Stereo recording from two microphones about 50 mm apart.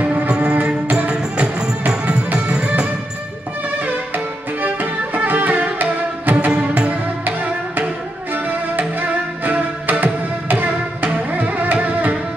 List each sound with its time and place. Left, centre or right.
0.0 s music: right
3.8 s music: right
6.5 s music: right
7.2 s music: right